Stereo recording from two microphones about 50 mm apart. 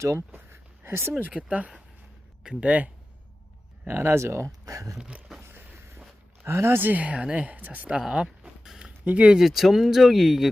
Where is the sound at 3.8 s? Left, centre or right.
Right.